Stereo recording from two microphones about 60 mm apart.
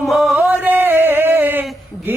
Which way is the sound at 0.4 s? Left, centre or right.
Right.